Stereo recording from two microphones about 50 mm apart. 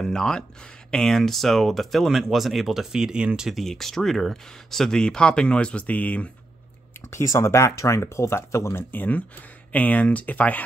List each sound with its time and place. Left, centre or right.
0.0 s speech: centre
3.5 s speech: centre; by 6.3 s left
7.1 s speech: left
8.9 s speech: left